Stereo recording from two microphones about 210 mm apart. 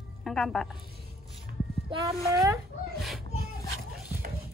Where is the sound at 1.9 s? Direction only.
15° right (ahead or behind).